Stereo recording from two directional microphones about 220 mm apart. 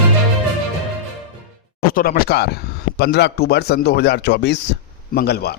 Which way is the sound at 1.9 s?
40° left (ahead or behind).